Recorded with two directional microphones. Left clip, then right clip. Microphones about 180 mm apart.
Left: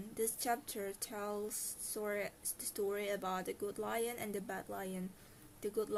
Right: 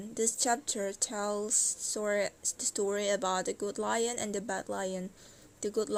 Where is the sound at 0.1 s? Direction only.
30° right (ahead or behind).